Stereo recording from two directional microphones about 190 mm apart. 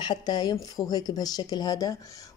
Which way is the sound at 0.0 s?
20° left (ahead or behind).